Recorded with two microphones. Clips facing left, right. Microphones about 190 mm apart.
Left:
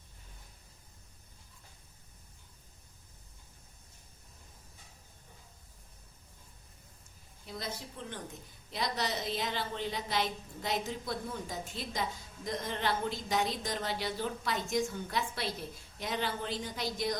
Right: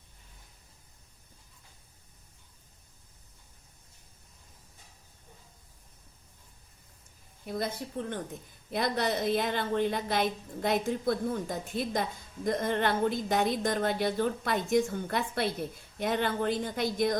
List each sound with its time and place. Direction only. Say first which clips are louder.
7.4 s a woman's voice: right 8 dB; 55° right (ahead or behind)